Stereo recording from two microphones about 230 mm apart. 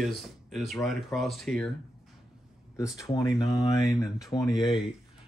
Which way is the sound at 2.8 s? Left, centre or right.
Centre.